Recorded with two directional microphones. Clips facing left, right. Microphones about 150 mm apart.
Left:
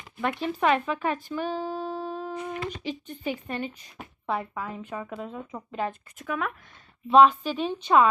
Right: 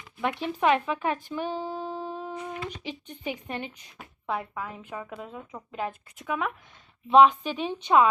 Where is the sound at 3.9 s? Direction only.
Centre (ahead or behind).